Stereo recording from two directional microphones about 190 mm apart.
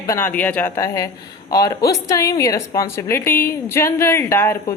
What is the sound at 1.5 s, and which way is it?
A woman's voice, 20° left (ahead or behind).